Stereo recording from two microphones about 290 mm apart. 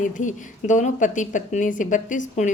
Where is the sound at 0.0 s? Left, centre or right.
Left.